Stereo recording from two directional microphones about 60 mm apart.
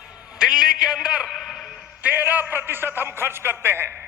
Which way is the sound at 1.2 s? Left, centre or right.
Centre.